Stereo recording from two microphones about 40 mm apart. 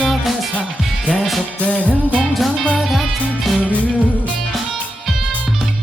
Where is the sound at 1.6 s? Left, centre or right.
Left.